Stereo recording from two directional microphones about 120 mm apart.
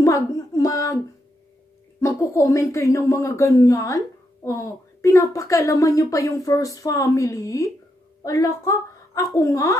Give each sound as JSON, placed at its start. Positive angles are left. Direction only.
{"t": 0.0, "sound": "child singing", "side_deg": 30}
{"t": 2.0, "sound": "a woman's voice", "side_deg": 25}